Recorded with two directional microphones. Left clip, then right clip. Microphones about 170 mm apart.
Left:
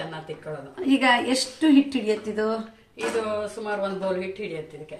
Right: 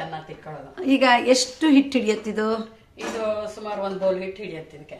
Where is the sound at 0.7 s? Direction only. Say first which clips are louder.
Right 3 dB; 15° right (ahead or behind); by 2.6 s 30° right (ahead or behind).